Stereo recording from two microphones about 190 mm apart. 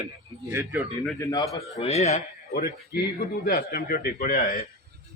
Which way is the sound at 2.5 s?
55° left (ahead or behind).